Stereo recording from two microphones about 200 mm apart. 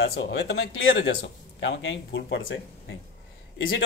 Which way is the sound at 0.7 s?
65° left (ahead or behind).